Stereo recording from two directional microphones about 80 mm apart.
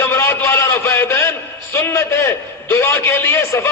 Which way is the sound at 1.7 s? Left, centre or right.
Left.